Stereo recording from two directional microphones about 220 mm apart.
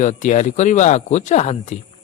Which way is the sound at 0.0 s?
35° left (ahead or behind).